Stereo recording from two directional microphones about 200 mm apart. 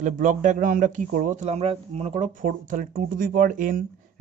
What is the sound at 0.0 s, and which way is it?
A man's voice, 40° right (ahead or behind).